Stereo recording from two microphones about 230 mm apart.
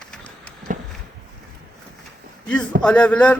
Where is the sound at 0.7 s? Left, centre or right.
Right.